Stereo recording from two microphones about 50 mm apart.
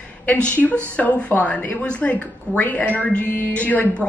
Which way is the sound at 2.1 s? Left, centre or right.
Left.